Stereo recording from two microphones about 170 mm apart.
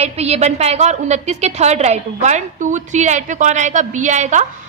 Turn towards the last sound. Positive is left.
turn(degrees=-45)  # may be behind; listen again after turning